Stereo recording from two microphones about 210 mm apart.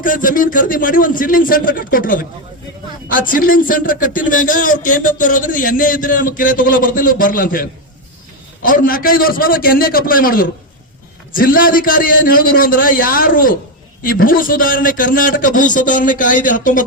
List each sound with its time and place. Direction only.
0.0 s a man's voice: 40° left (ahead or behind)